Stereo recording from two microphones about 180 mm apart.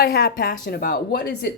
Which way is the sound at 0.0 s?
65° left (ahead or behind).